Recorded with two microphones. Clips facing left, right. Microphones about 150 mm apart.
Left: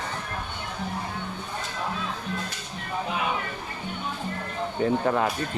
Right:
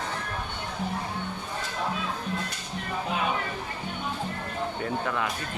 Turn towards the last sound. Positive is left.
turn(degrees=40)  # may be behind; listen again after turning